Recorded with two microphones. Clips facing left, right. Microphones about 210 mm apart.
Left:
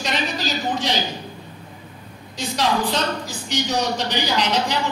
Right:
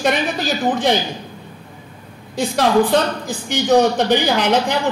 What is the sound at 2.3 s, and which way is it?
Speech, 55° right (ahead or behind).